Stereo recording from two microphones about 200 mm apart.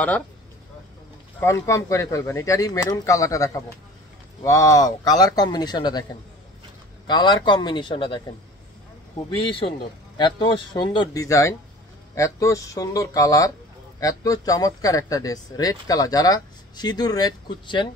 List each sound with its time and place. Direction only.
1.4 s speech: 15° left (ahead or behind)
7.1 s speech: 20° left (ahead or behind)
9.5 s speech: 25° left (ahead or behind)